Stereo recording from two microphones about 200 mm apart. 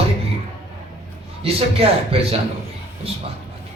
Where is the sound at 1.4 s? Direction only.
30° right (ahead or behind).